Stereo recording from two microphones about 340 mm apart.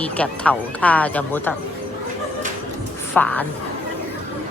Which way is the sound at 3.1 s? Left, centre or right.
Centre.